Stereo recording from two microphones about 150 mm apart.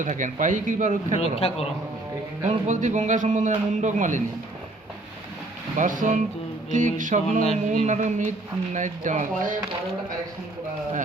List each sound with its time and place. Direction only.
0.0 s speech: 55° right (ahead or behind)
1.2 s a man's voice: 40° left (ahead or behind)
2.4 s a man's voice: 50° right (ahead or behind)
5.7 s a man's voice: 60° right (ahead or behind)